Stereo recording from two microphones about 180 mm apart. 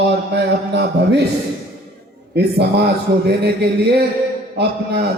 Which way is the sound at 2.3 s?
65° right (ahead or behind).